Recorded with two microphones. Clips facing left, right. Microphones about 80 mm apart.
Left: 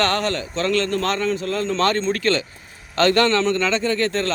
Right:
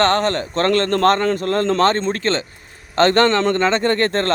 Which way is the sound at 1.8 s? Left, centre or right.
Right.